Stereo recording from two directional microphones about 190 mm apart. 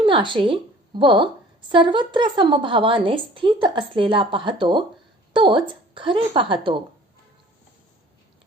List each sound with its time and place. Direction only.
0.0 s a woman's voice: 25° right (ahead or behind)